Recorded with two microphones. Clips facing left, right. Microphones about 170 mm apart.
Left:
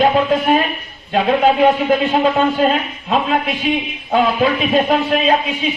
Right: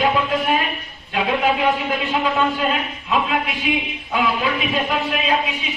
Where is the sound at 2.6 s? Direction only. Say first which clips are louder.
Left 6 dB; 35° left (ahead or behind).